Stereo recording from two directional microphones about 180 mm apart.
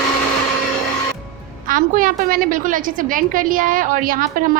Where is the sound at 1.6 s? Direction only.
50° right (ahead or behind).